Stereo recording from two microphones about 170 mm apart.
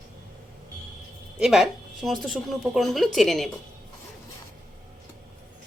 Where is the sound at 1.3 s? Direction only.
5° right (ahead or behind).